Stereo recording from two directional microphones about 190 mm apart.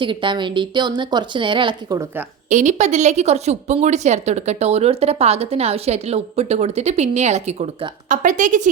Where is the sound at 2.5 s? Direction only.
40° right (ahead or behind).